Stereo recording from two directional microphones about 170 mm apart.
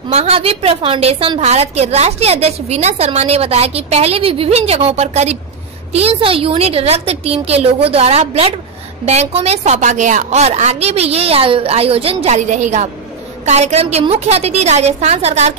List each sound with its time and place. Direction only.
0.1 s a woman's voice: 35° right (ahead or behind)